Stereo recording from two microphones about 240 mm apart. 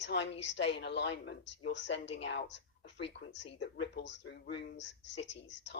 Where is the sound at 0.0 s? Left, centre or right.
Left.